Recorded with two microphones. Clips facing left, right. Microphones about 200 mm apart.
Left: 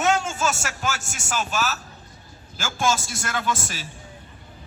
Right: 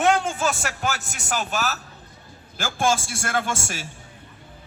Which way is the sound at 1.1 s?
60° right (ahead or behind).